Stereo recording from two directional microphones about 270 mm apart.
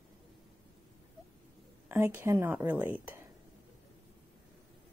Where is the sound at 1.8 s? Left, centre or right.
Centre.